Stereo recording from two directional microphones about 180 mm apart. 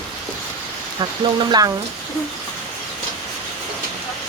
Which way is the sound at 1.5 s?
20° right (ahead or behind).